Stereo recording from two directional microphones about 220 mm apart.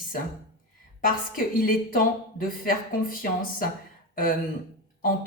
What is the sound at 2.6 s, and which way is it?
A woman's voice, 40° left (ahead or behind).